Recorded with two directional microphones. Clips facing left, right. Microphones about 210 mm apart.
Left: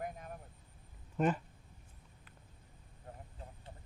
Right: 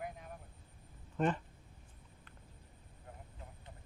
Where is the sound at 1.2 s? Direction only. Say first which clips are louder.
Left 1 dB; 5° left (ahead or behind).